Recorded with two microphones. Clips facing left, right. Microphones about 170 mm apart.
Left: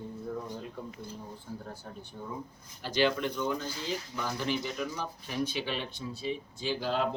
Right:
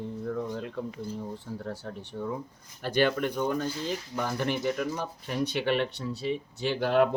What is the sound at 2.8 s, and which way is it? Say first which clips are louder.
Speech: right 3 dB; 55° right (ahead or behind).